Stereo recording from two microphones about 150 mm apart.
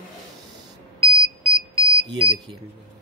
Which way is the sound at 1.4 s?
40° right (ahead or behind).